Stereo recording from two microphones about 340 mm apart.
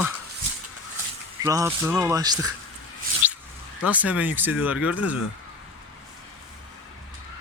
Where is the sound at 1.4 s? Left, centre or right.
Centre.